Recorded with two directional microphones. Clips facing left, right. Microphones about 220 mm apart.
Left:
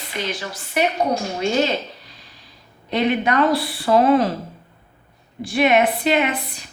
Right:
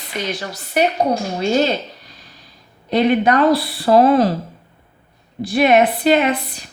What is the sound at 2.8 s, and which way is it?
A woman's voice, 40° right (ahead or behind).